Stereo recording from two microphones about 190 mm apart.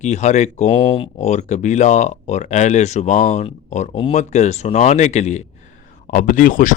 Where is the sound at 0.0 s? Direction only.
35° left (ahead or behind).